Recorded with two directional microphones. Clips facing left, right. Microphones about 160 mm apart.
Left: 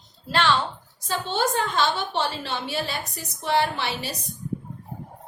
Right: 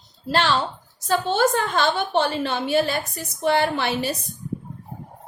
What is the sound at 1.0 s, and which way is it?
A woman's voice, 50° right (ahead or behind).